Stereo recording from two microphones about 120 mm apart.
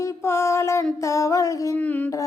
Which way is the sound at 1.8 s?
15° left (ahead or behind).